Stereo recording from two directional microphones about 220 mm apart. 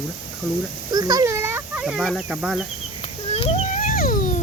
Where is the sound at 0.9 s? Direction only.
15° right (ahead or behind); by 2.6 s centre (ahead or behind).